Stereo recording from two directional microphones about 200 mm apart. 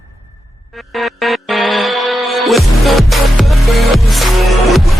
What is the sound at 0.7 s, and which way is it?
Music, centre (ahead or behind).